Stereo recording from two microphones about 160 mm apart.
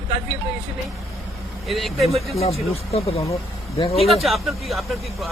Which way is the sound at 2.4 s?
40° left (ahead or behind).